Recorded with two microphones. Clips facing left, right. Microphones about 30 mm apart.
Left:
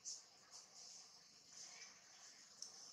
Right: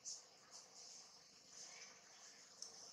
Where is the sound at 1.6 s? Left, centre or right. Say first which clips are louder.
Even; centre.